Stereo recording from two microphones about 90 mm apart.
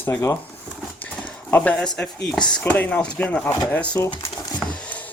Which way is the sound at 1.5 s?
20° left (ahead or behind).